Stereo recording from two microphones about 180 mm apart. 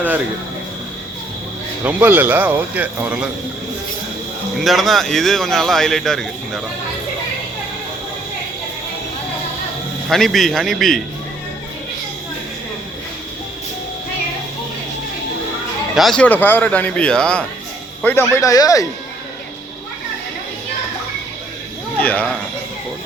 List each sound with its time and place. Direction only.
1.8 s speech: 10° right (ahead or behind)
4.6 s speech: centre (ahead or behind)
10.1 s speech: centre (ahead or behind)
16.0 s speech: centre (ahead or behind); by 18.9 s 20° left (ahead or behind)
21.9 s speech: 10° left (ahead or behind)